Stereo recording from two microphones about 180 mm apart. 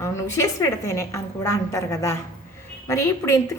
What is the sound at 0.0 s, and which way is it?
A woman's voice, 15° left (ahead or behind).